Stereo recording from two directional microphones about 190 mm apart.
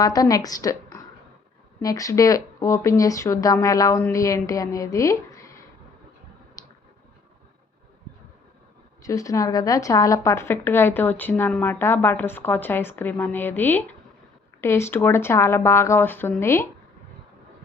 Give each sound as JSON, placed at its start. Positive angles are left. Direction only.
{"t": 0.0, "sound": "a woman's voice", "side_deg": 20}
{"t": 6.6, "sound": "a sound", "side_deg": 20}
{"t": 9.0, "sound": "a woman's voice", "side_deg": 15}